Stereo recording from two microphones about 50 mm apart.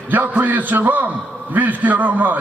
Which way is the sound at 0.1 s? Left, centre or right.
Right.